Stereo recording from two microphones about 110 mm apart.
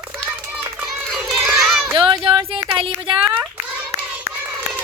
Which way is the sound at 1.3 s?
5° right (ahead or behind).